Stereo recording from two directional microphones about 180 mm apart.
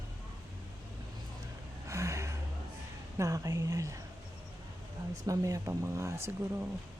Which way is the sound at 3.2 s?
20° right (ahead or behind).